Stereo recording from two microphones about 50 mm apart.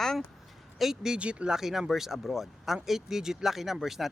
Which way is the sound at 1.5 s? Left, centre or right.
Centre.